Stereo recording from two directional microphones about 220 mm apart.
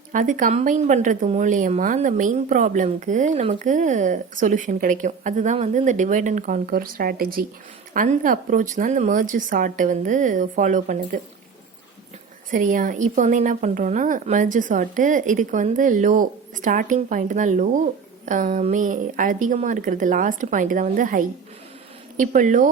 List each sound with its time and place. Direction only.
0.1 s a woman's voice: 35° right (ahead or behind)
12.5 s a woman's voice: 35° right (ahead or behind)